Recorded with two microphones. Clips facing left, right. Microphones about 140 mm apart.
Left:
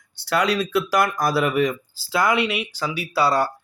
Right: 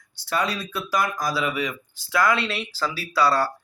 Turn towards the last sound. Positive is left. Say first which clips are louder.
# left 1 dB
turn(degrees=20)  # may be behind; listen again after turning